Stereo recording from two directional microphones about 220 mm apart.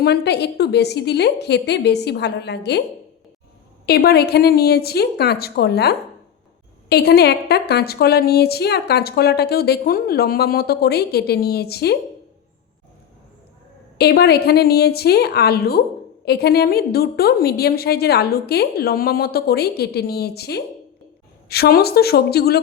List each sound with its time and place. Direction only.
0.0 s a woman's voice: 50° left (ahead or behind)
3.8 s a woman's voice: 45° left (ahead or behind)
14.0 s a woman's voice: 45° left (ahead or behind)